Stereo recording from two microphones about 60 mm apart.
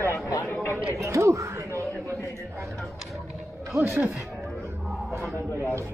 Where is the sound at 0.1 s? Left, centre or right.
Left.